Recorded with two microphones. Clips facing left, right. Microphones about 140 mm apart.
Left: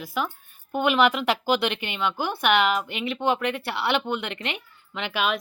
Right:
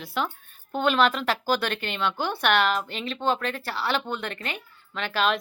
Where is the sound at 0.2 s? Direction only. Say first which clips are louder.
Even; 5° left (ahead or behind).